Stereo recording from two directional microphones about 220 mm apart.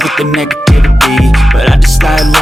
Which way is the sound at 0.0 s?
Centre (ahead or behind).